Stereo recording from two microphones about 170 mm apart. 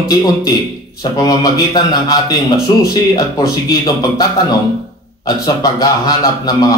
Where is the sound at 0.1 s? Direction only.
20° left (ahead or behind).